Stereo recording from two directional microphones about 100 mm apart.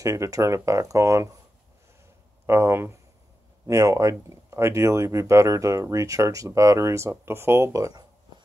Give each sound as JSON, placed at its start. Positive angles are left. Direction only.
{"t": 0.0, "sound": "speech", "side_deg": -30}
{"t": 2.4, "sound": "speech", "side_deg": -25}